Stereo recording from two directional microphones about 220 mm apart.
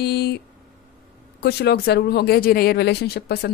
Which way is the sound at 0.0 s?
50° left (ahead or behind).